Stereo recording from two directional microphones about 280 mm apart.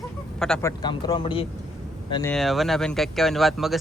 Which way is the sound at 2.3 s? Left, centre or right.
Centre.